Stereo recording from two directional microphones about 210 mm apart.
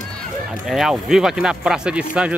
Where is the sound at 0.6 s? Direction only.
Centre (ahead or behind).